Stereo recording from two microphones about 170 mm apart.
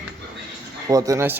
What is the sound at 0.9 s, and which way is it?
Speech, 20° right (ahead or behind).